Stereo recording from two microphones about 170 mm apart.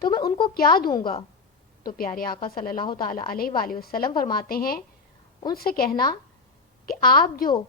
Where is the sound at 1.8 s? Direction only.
60° left (ahead or behind).